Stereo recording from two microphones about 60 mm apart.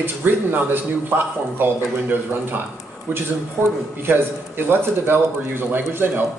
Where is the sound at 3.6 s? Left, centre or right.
Right.